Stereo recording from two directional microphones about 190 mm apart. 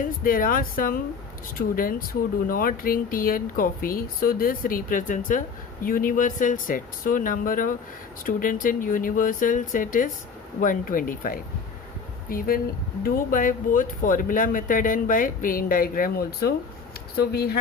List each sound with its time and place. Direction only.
0.0 s speech: 50° left (ahead or behind)